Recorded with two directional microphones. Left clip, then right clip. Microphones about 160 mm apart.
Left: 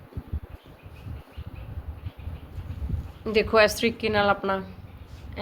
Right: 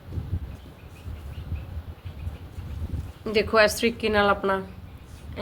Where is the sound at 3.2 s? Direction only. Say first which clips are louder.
Even; 20° left (ahead or behind).